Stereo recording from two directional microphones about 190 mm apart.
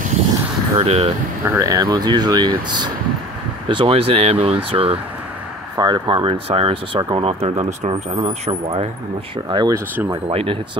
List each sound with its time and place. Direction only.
0.7 s speech: 30° right (ahead or behind)
1.4 s speech: 15° right (ahead or behind); by 10.6 s 30° right (ahead or behind)